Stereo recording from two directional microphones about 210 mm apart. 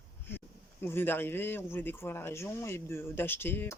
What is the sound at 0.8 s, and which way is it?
Speech, 10° left (ahead or behind).